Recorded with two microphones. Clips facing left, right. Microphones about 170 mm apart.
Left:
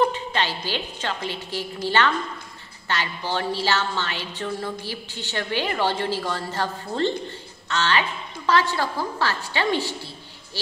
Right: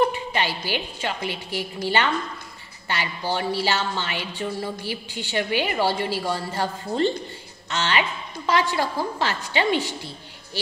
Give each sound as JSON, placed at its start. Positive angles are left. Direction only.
{"t": 0.1, "sound": "a woman's voice", "side_deg": -10}